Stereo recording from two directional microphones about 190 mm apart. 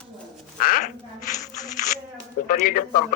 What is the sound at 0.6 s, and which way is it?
Speech, 50° left (ahead or behind).